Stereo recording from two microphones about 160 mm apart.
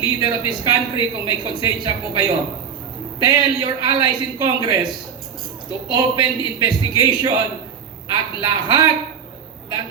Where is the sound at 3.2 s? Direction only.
30° right (ahead or behind).